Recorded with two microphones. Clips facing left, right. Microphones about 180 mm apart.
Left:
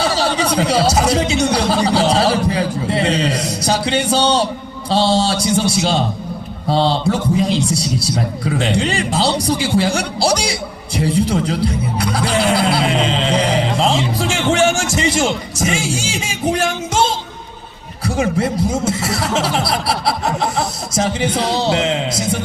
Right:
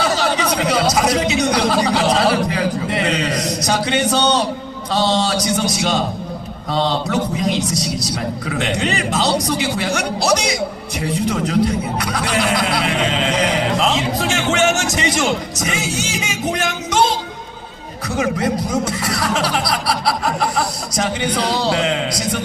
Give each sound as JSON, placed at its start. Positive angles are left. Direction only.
{"t": 0.0, "sound": "a man's voice", "side_deg": 30}